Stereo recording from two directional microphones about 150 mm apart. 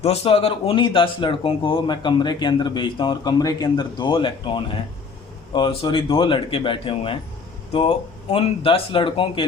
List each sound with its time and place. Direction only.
0.0 s speech: 45° left (ahead or behind)